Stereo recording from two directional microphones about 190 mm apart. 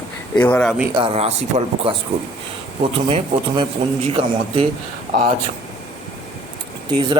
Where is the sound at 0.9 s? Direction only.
30° right (ahead or behind).